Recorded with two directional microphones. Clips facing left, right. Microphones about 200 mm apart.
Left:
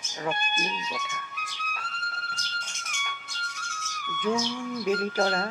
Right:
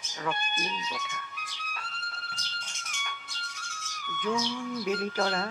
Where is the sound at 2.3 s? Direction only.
45° left (ahead or behind).